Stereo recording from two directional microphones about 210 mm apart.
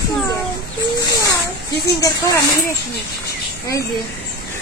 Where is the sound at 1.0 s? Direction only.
15° left (ahead or behind).